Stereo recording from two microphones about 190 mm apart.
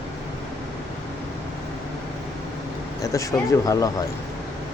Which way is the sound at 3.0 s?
15° left (ahead or behind).